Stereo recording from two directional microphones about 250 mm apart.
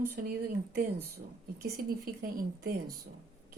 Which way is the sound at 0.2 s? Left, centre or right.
Right.